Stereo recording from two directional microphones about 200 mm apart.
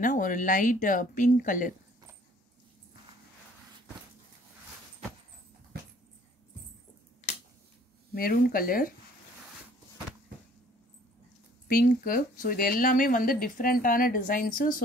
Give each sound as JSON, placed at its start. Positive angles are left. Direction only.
{"t": 0.0, "sound": "speech", "side_deg": 40}
{"t": 7.3, "sound": "finger snapping", "side_deg": 35}
{"t": 8.1, "sound": "speech", "side_deg": 50}
{"t": 11.6, "sound": "speech", "side_deg": 45}